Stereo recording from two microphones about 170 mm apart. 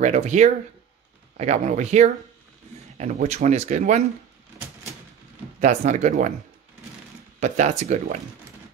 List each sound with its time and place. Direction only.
0.0 s speech: 45° right (ahead or behind)
5.6 s speech: 45° right (ahead or behind)
7.3 s speech: 45° right (ahead or behind)